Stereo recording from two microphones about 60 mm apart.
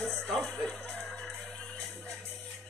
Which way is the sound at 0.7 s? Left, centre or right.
Centre.